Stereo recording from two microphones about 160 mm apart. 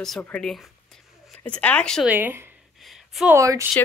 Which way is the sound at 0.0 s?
5° left (ahead or behind).